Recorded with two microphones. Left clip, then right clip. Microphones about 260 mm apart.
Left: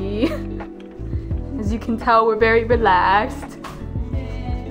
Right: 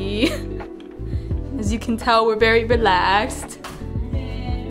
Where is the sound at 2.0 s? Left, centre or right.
Centre.